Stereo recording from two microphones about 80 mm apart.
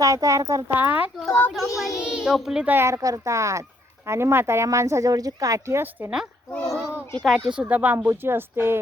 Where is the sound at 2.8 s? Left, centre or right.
Right.